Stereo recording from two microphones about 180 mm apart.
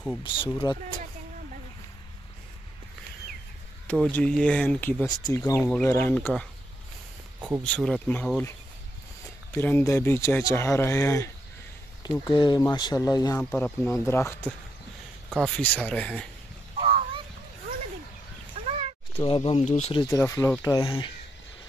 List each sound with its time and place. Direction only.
0.2 s speech: 30° left (ahead or behind)
3.8 s speech: 5° left (ahead or behind)
5.1 s speech: 20° left (ahead or behind)
5.6 s speech: 10° left (ahead or behind)
7.3 s a sound: 10° right (ahead or behind)
7.6 s speech: 5° left (ahead or behind)
9.6 s speech: 10° left (ahead or behind)
12.3 s speech: 25° left (ahead or behind)
13.4 s speech: 5° left (ahead or behind)
16.7 s a sound: 30° right (ahead or behind)
18.6 s a sound: 35° right (ahead or behind)
19.1 s speech: 30° left (ahead or behind)
20.1 s speech: 15° left (ahead or behind)